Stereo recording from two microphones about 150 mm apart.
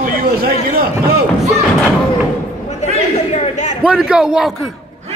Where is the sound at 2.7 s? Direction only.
50° left (ahead or behind).